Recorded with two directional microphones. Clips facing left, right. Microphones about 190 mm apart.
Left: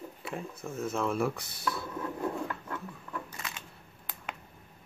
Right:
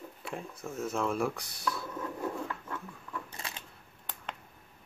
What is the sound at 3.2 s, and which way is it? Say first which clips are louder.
Camera: left 1 dB; 30° right (ahead or behind).